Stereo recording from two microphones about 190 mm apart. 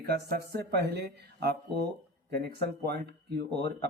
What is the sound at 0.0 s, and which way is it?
Speech, 60° right (ahead or behind).